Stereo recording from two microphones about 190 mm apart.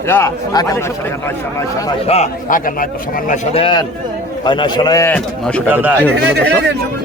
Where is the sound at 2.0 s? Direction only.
35° left (ahead or behind); by 5.1 s 20° left (ahead or behind).